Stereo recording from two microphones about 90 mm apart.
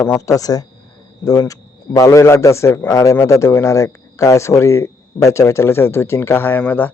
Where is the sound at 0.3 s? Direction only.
40° left (ahead or behind).